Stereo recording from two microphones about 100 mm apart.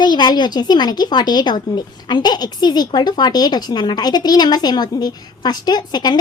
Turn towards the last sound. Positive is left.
turn(degrees=45)  # may be behind; listen again after turning